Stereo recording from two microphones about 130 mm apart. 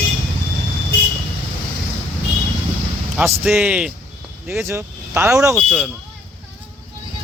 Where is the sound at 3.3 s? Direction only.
15° right (ahead or behind).